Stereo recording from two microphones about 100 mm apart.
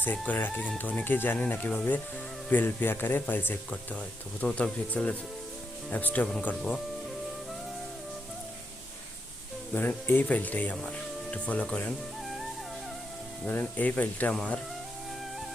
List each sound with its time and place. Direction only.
0.0 s speech: 15° left (ahead or behind)
9.7 s speech: 20° left (ahead or behind)
11.9 s music: centre (ahead or behind)
13.5 s speech: 15° left (ahead or behind)